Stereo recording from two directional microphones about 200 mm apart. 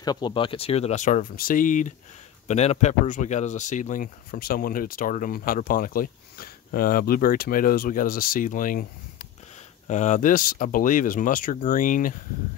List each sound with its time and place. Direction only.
0.0 s speech: 20° left (ahead or behind); by 8.8 s 40° left (ahead or behind)
9.8 s speech: 35° left (ahead or behind)